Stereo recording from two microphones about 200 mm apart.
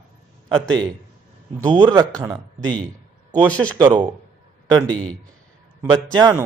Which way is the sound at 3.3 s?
20° right (ahead or behind).